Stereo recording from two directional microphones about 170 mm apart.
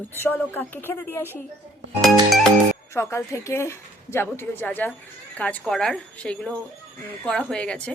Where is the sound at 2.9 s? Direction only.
15° left (ahead or behind).